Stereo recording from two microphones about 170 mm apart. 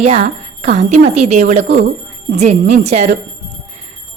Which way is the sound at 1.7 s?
75° right (ahead or behind).